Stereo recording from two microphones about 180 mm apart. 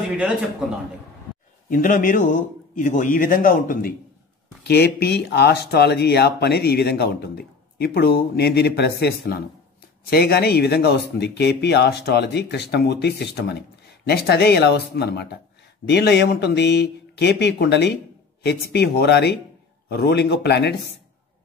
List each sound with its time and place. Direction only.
1.7 s a man's voice: 45° left (ahead or behind)
4.6 s speech: 65° left (ahead or behind)